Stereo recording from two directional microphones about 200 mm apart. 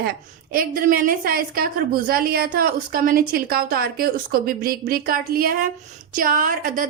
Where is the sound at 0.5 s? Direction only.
45° right (ahead or behind).